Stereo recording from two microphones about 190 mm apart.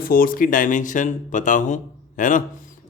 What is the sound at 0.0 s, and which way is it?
Speech, 50° left (ahead or behind).